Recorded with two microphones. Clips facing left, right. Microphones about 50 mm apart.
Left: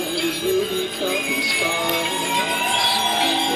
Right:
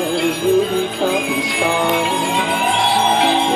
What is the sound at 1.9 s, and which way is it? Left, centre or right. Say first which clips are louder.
Music: right 5 dB; centre.